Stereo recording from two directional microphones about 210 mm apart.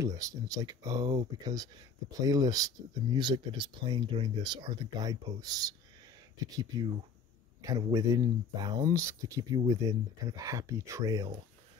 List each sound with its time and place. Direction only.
0.0 s speech: 15° right (ahead or behind)